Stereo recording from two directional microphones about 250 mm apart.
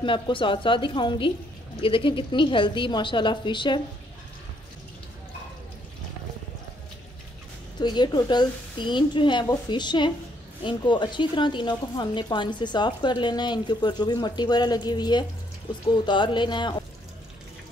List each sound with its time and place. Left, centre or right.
0.0 s a woman's voice: centre
7.8 s a woman's voice: centre